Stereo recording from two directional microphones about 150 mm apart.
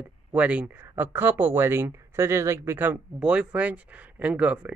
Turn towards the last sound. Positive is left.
turn(degrees=-10)  # may be behind; listen again after turning